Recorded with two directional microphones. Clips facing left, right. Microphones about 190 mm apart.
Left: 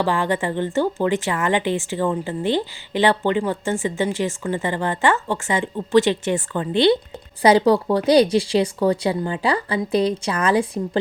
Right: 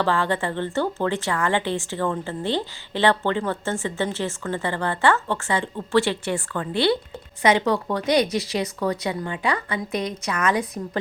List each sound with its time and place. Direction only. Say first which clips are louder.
0.0 s speech: left 2 dB; 15° left (ahead or behind)
7.4 s speech: left 5 dB; 35° left (ahead or behind)